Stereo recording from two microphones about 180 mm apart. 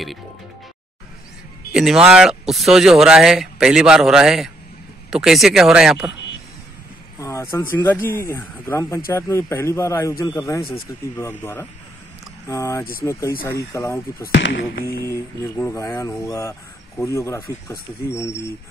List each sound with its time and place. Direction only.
1.7 s speech: centre (ahead or behind)
7.2 s vehicle: 15° left (ahead or behind)
7.7 s speech: 10° left (ahead or behind)
14.2 s speech: 80° left
14.8 s music: 55° left (ahead or behind)
15.0 s speech: 15° left (ahead or behind)